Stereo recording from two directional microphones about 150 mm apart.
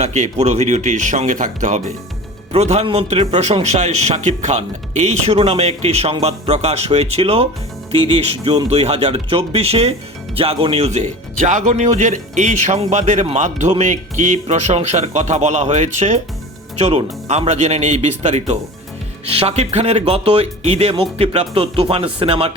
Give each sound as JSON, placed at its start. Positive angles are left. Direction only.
{"t": 0.0, "sound": "a man's voice", "side_deg": -50}